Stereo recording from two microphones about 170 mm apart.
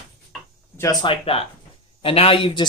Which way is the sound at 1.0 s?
30° left (ahead or behind).